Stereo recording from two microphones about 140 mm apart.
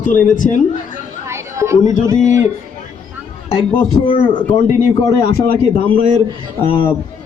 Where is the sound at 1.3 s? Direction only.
20° right (ahead or behind).